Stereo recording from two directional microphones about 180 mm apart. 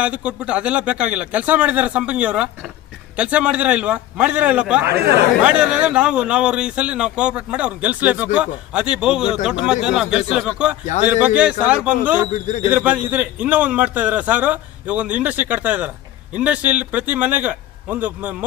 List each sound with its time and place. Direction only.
0.0 s a man's voice: 5° right (ahead or behind)
12.3 s speech: 40° left (ahead or behind)
12.6 s a man's voice: 10° right (ahead or behind)